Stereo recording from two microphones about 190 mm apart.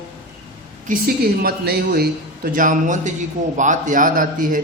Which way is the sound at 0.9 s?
50° right (ahead or behind).